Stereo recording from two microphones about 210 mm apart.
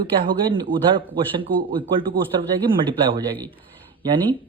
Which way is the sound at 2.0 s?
25° right (ahead or behind).